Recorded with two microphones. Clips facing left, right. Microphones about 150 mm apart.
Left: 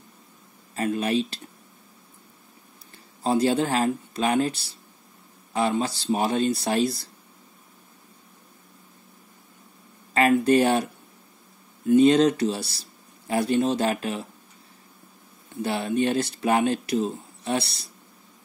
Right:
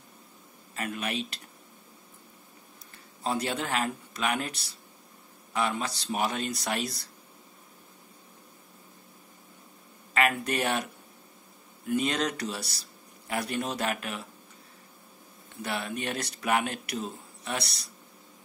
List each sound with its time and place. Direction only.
0.7 s speech: 30° left (ahead or behind)
3.3 s speech: 30° left (ahead or behind)
10.1 s speech: 30° left (ahead or behind)
15.6 s speech: 30° left (ahead or behind)